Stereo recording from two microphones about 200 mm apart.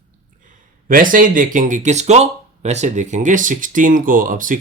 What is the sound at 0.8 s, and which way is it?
Speech, 45° right (ahead or behind).